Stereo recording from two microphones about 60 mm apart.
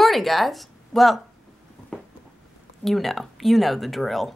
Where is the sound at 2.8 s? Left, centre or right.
Centre.